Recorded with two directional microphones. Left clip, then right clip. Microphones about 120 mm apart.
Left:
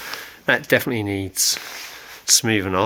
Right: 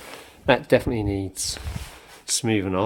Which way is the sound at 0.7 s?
Centre (ahead or behind).